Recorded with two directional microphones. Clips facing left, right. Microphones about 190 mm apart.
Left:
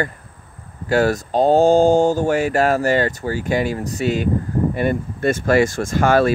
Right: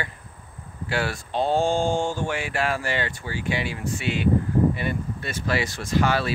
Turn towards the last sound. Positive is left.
turn(degrees=50)  # may be behind; listen again after turning